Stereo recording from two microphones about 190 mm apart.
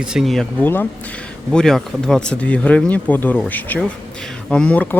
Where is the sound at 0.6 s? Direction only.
10° left (ahead or behind).